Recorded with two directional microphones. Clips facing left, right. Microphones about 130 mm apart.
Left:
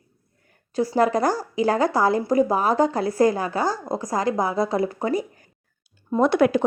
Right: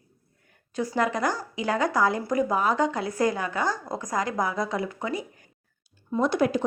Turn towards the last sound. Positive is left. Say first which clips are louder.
# left 5 dB
turn(degrees=65)  # may be behind; listen again after turning